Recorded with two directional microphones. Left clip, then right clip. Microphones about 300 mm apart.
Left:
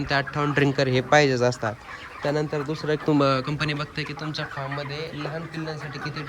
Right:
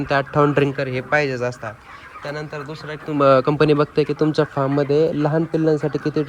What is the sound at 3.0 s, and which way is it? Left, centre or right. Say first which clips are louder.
Speech: right 9 dB; centre.